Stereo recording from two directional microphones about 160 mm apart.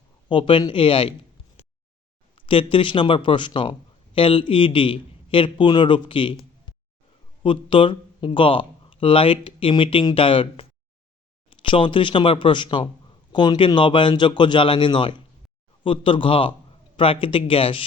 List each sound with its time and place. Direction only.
0.3 s speech: 30° left (ahead or behind)
2.3 s speech: 35° left (ahead or behind)
7.4 s a man's voice: 35° left (ahead or behind)